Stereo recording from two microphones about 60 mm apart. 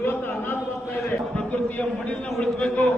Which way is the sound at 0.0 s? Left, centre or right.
Left.